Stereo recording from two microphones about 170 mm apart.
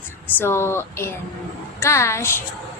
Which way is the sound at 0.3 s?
15° left (ahead or behind).